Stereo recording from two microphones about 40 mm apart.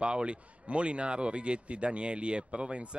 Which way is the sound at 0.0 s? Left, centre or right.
Right.